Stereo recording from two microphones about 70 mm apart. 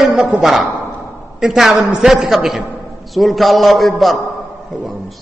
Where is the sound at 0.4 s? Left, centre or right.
Centre.